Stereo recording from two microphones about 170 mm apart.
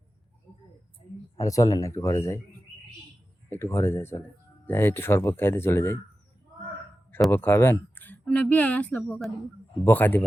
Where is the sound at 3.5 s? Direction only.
15° left (ahead or behind).